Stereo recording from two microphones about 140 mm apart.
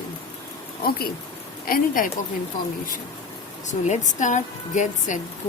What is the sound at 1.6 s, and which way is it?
Speech, 85° left.